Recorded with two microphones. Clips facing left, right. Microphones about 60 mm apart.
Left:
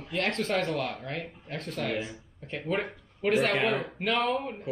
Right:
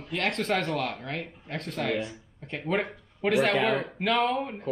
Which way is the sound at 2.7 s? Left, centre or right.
Right.